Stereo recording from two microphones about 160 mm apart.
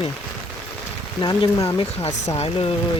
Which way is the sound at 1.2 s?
25° left (ahead or behind).